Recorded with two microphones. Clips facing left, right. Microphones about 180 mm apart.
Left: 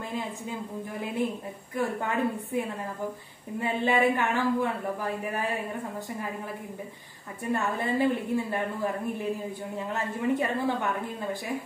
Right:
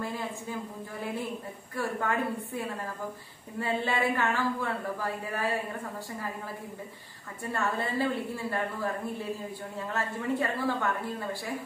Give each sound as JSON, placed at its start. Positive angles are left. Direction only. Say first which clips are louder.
{"t": 1.8, "sound": "a woman's voice", "louder": "left 2 dB", "side_deg": 20}
{"t": 7.5, "sound": "a woman's voice", "louder": "left 3 dB", "side_deg": 15}